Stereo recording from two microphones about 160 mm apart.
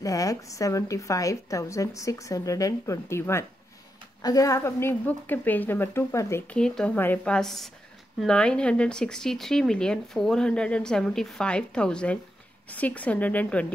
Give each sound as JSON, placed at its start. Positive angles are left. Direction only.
{"t": 0.0, "sound": "a woman's voice", "side_deg": 20}
{"t": 6.5, "sound": "speech", "side_deg": 5}